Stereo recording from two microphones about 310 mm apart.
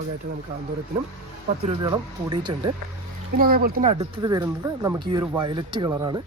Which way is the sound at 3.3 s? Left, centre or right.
Right.